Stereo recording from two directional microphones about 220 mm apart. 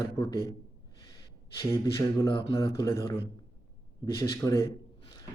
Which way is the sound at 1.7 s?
20° left (ahead or behind).